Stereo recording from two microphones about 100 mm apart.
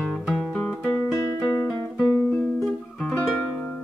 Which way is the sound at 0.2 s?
5° left (ahead or behind).